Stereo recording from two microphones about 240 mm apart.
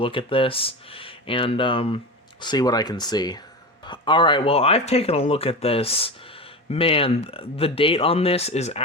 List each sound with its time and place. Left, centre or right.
0.0 s speech: left